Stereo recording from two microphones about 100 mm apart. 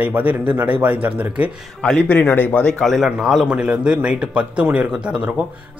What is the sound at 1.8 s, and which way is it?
A man's voice, 10° left (ahead or behind).